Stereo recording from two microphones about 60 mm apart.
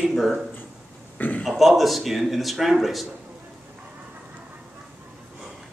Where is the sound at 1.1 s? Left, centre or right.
Left.